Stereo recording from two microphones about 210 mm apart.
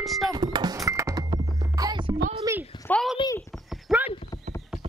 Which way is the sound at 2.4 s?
15° right (ahead or behind).